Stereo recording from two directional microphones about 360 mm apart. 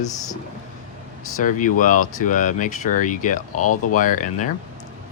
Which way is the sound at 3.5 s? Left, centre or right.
Left.